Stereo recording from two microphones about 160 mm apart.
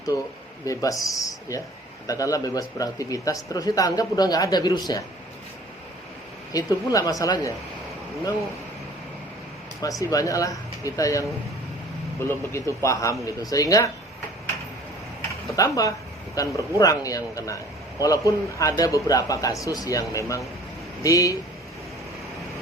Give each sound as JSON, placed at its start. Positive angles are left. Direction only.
{"t": 0.6, "sound": "a man's voice", "side_deg": 20}
{"t": 6.5, "sound": "a man's voice", "side_deg": 20}
{"t": 9.8, "sound": "a man's voice", "side_deg": 20}
{"t": 12.3, "sound": "a man's voice", "side_deg": 15}
{"t": 15.5, "sound": "a man's voice", "side_deg": 20}